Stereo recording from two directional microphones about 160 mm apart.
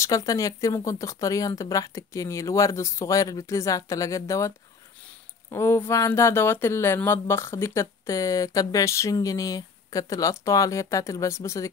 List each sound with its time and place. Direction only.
0.0 s speech: 20° left (ahead or behind)